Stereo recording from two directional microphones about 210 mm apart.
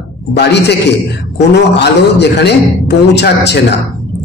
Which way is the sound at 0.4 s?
55° left (ahead or behind).